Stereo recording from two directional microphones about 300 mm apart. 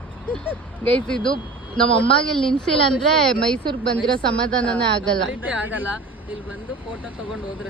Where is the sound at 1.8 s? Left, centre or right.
Centre.